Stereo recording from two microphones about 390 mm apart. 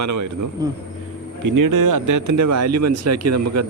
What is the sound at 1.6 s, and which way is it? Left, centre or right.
Speech, right.